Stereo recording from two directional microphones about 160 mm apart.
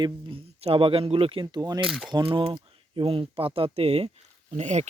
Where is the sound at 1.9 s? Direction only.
Centre (ahead or behind).